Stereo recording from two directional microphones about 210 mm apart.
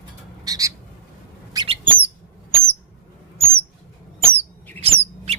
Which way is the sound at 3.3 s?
25° right (ahead or behind).